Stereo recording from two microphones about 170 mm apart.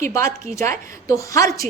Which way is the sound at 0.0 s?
15° left (ahead or behind).